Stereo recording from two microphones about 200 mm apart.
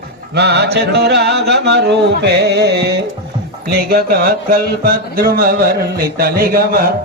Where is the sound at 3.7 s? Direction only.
50° right (ahead or behind).